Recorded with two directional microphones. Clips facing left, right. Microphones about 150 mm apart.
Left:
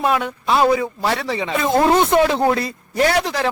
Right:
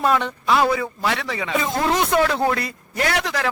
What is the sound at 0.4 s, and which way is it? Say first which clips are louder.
Speech: left 4 dB; 25° left (ahead or behind).